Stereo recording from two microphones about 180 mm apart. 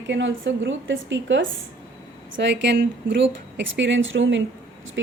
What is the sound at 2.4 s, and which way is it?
A woman's voice, 75° right (ahead or behind).